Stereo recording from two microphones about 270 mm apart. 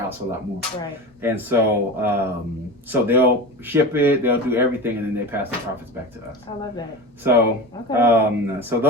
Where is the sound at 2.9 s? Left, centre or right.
Centre.